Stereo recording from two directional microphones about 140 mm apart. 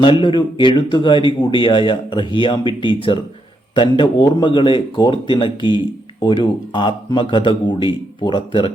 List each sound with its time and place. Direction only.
0.0 s speech: 35° left (ahead or behind)